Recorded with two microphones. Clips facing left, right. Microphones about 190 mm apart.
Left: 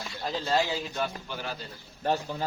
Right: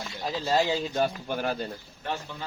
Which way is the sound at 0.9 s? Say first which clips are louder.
Right 6 dB; 50° right (ahead or behind).